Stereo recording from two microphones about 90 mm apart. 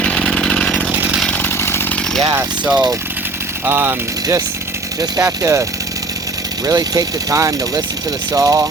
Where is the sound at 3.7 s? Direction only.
25° right (ahead or behind).